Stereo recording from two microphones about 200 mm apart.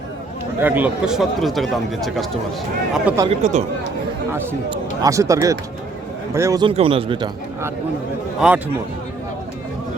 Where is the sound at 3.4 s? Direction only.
35° right (ahead or behind).